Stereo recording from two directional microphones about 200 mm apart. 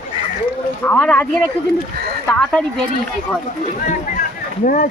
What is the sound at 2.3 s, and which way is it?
Speech, 5° left (ahead or behind).